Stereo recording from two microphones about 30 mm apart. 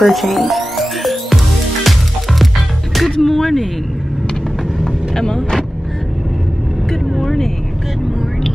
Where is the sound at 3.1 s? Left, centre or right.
Centre.